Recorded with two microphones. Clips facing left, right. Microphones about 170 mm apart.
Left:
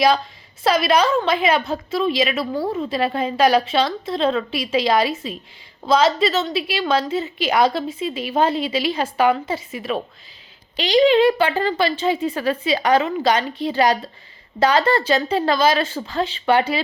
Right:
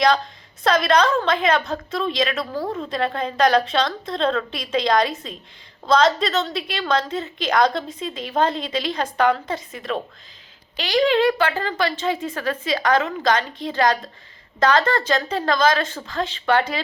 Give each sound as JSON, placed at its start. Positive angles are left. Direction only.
{"t": 0.6, "sound": "a woman's voice", "side_deg": 5}